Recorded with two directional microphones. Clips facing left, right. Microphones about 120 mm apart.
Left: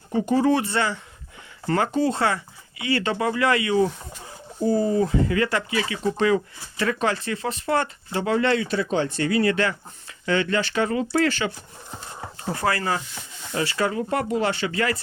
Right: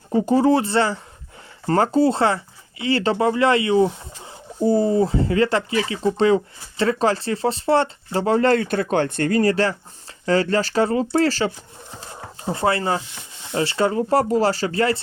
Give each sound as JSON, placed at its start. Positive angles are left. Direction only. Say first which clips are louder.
{"t": 0.1, "sound": "speech", "louder": "right 3 dB", "side_deg": -30}